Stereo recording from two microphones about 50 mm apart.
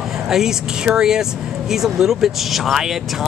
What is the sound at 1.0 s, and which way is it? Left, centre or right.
Speech, centre.